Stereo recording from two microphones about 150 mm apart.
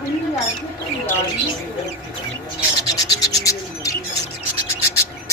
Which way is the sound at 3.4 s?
20° left (ahead or behind).